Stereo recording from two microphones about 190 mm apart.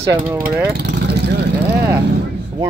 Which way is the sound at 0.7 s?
60° right (ahead or behind).